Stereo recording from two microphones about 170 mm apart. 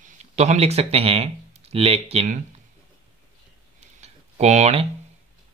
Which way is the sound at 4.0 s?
40° right (ahead or behind).